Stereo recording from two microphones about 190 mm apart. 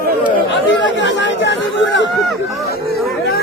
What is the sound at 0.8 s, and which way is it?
Speech, 70° left (ahead or behind).